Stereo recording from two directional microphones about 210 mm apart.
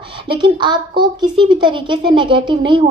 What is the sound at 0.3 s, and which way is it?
A woman's voice, 20° right (ahead or behind).